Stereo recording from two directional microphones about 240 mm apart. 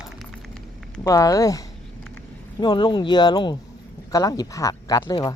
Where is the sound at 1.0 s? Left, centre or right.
Centre.